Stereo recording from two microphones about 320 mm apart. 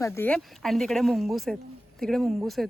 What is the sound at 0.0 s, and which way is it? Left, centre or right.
Speech, centre.